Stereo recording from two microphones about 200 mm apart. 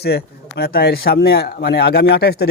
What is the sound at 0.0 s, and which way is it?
Speech, 55° left (ahead or behind).